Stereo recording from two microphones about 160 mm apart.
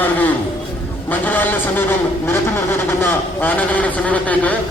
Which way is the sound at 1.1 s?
10° left (ahead or behind).